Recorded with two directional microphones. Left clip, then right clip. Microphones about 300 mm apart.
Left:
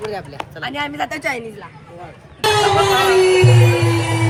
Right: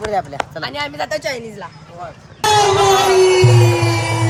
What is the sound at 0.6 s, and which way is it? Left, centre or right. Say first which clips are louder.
Speech: left 4 dB; left.